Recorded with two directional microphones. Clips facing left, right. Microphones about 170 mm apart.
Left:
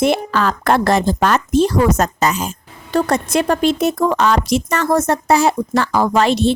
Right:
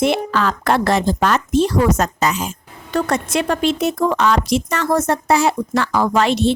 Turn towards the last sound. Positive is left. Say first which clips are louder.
# left 1 dB
turn(degrees=35)  # may be behind; listen again after turning